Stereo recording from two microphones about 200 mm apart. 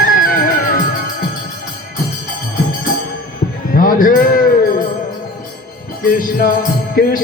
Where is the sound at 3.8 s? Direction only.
45° left (ahead or behind).